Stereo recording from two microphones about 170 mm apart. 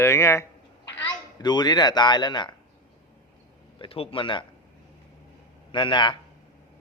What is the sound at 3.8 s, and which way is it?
Speech, 30° left (ahead or behind).